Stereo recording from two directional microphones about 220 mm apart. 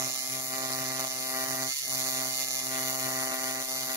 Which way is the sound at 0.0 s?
15° right (ahead or behind).